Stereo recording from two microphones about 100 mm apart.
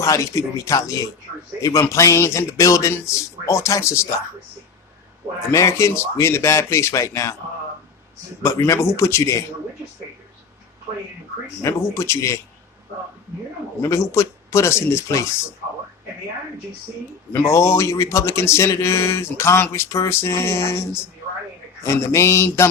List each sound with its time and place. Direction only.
0.0 s speech: 35° left (ahead or behind)
5.5 s speech: 30° left (ahead or behind)
8.4 s speech: 30° left (ahead or behind)
11.6 s speech: 25° left (ahead or behind)
13.8 s speech: 30° left (ahead or behind)
17.3 s speech: 30° left (ahead or behind)